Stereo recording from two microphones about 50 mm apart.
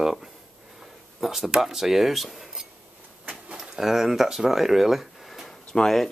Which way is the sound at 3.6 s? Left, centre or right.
Centre.